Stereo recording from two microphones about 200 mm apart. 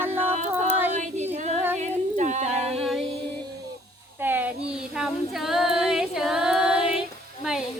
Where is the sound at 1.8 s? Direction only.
35° right (ahead or behind).